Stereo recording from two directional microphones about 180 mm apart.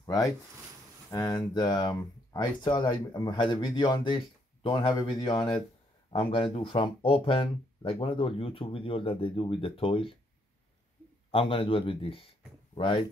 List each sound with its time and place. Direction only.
0.0 s speech: 20° left (ahead or behind)
11.3 s speech: 30° left (ahead or behind)